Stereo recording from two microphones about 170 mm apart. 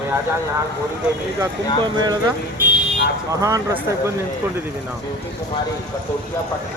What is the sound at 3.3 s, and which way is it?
Speech, 20° right (ahead or behind).